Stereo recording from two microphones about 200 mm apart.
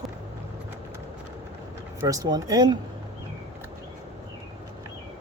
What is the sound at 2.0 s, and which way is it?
Speech, 15° right (ahead or behind).